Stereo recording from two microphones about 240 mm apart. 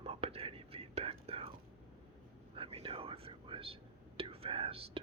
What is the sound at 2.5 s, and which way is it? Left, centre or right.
Whispering, right.